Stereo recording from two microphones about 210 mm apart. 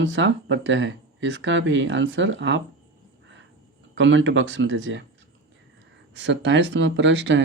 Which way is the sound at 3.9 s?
65° right (ahead or behind).